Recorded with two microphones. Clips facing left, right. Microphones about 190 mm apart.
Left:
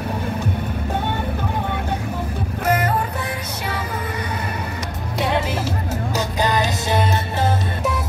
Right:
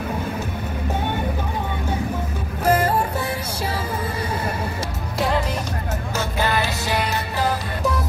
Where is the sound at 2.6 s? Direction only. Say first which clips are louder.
Right 2 dB; 30° right (ahead or behind).